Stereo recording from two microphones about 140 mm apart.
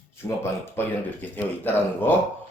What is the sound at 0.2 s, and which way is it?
A man's voice, 20° left (ahead or behind).